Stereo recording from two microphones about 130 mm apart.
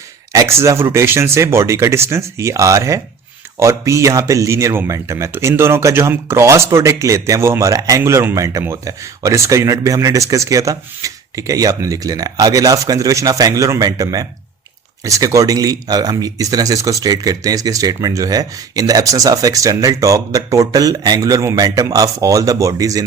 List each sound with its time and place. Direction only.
0.3 s speech: 20° right (ahead or behind)